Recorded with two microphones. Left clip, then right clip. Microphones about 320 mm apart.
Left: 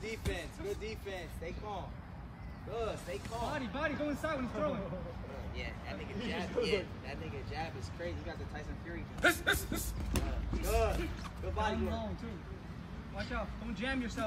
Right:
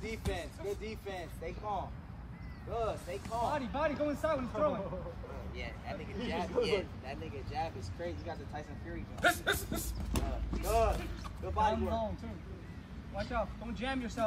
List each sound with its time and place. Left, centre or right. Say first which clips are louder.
0.3 s speech: right 3 dB; centre
9.2 s speech: even; centre
10.7 s speech: right 3 dB; centre
13.3 s speech: right 5 dB; centre